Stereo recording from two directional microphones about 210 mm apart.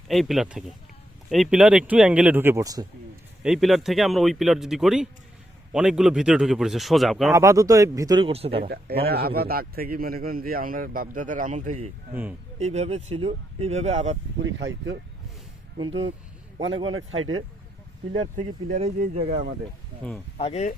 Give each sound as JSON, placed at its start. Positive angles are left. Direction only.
{"t": 0.1, "sound": "speech", "side_deg": 0}
{"t": 3.4, "sound": "speech", "side_deg": 0}
{"t": 7.3, "sound": "speech", "side_deg": -15}
{"t": 8.6, "sound": "a man's voice", "side_deg": -50}
{"t": 14.4, "sound": "speech", "side_deg": -60}
{"t": 16.6, "sound": "a man's voice", "side_deg": -65}
{"t": 17.1, "sound": "speech", "side_deg": -25}
{"t": 19.1, "sound": "speech", "side_deg": -30}
{"t": 20.0, "sound": "speech", "side_deg": 5}
{"t": 20.4, "sound": "speech", "side_deg": 30}